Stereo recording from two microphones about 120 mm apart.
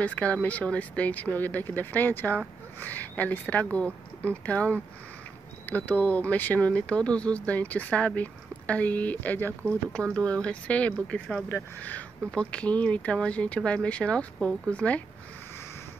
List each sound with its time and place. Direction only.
0.0 s speech: 10° left (ahead or behind)